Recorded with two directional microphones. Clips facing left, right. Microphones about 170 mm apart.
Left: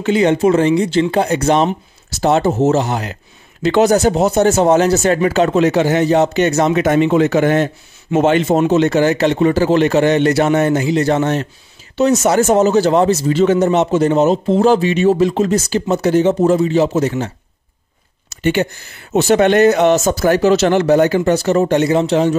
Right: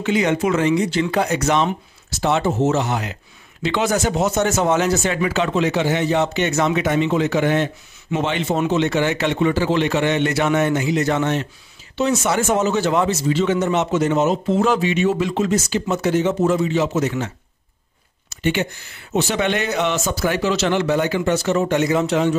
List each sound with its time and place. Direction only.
0.0 s speech: 30° left (ahead or behind)
18.3 s speech: 40° left (ahead or behind)